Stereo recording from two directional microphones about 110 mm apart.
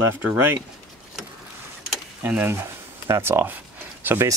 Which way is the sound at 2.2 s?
20° right (ahead or behind).